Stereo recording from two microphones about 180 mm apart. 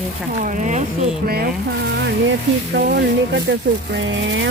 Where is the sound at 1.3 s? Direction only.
60° right (ahead or behind).